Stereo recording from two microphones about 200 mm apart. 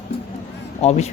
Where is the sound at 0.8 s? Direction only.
35° left (ahead or behind).